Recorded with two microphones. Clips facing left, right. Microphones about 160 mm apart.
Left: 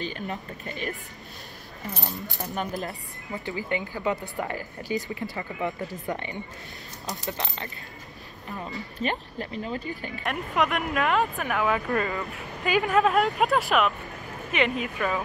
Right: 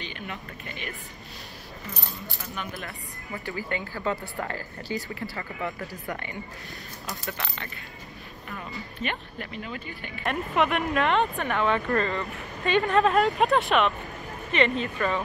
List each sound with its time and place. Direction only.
0.0 s speech: 40° left (ahead or behind)
2.1 s speech: 20° left (ahead or behind)
2.5 s speech: 40° left (ahead or behind)
3.4 s speech: 20° left (ahead or behind); by 10.2 s 35° left (ahead or behind)
10.2 s speech: centre (ahead or behind)